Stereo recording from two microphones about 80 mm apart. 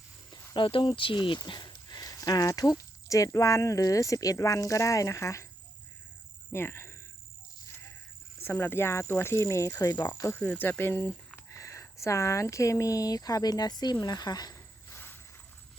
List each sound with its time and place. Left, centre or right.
0.5 s speech: left
6.5 s speech: left
8.4 s speech: left
10.1 s speech: left
10.4 s speech: left
11.4 s speech: left
14.0 s cricket: left
14.9 s a sound: left